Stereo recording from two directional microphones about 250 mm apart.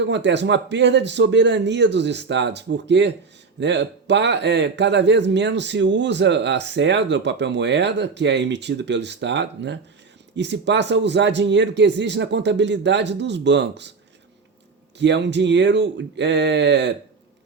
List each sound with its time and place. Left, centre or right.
0.0 s speech: right
14.9 s speech: right